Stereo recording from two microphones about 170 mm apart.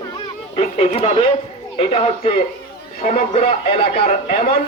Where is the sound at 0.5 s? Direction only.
35° left (ahead or behind).